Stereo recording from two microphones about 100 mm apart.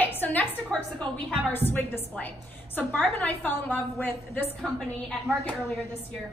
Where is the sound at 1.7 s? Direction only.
20° left (ahead or behind).